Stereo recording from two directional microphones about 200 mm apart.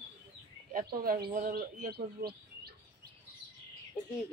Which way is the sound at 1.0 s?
45° right (ahead or behind).